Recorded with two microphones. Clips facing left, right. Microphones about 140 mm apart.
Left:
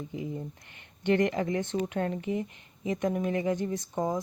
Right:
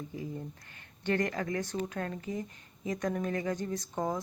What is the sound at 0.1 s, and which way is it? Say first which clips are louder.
Speech: left 4 dB; 15° left (ahead or behind).